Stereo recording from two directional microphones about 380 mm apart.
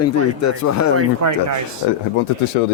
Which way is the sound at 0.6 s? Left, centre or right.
Left.